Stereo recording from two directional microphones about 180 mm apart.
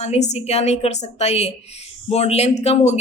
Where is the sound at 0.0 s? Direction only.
40° left (ahead or behind).